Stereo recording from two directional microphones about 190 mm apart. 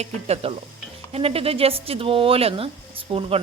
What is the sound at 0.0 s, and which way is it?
A woman's voice, 30° right (ahead or behind).